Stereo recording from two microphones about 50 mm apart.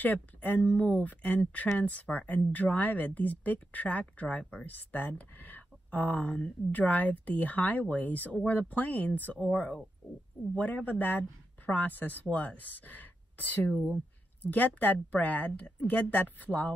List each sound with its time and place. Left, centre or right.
0.0 s speech: left